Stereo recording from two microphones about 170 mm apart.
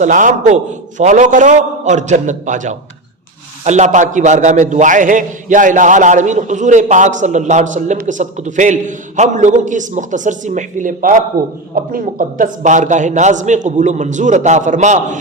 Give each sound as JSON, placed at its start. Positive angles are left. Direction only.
{"t": 0.0, "sound": "a man's voice", "side_deg": -50}